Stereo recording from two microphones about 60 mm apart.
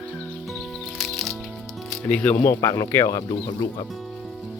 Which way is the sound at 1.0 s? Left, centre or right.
Centre.